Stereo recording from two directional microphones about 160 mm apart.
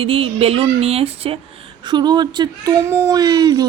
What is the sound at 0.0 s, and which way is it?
A woman's voice, 35° right (ahead or behind).